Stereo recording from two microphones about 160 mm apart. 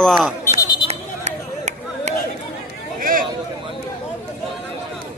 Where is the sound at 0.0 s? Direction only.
Centre (ahead or behind).